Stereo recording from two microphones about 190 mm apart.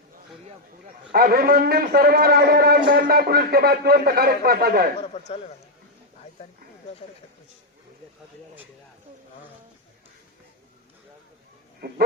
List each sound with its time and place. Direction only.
1.1 s a man's voice: 55° right (ahead or behind)
5.1 s a man's voice: 35° left (ahead or behind)
11.8 s a sound: 55° right (ahead or behind)